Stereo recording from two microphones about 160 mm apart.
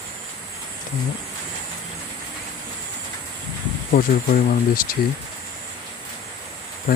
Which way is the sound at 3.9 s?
65° left (ahead or behind).